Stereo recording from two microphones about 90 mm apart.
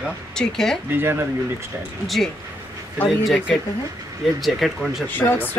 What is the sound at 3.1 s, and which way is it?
Speech, centre (ahead or behind).